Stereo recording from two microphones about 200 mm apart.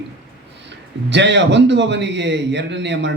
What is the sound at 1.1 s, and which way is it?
A man's voice, 60° right (ahead or behind).